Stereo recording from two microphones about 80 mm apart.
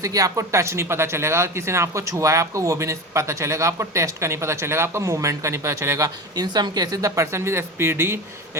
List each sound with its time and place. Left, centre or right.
0.0 s speech: right
6.3 s speech: right